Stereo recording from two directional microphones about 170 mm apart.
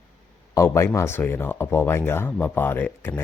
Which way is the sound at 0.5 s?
15° left (ahead or behind).